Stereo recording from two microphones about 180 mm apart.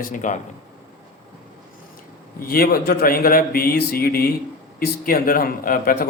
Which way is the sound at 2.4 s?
55° left (ahead or behind).